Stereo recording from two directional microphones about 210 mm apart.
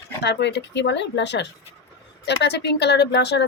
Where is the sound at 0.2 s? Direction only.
55° left (ahead or behind).